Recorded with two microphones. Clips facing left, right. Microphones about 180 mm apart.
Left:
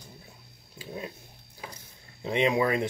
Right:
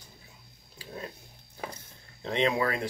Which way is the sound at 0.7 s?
25° left (ahead or behind).